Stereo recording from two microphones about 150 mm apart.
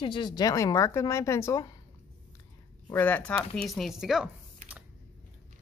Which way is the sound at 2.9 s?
10° left (ahead or behind).